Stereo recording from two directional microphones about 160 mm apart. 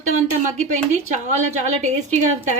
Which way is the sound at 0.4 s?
45° right (ahead or behind).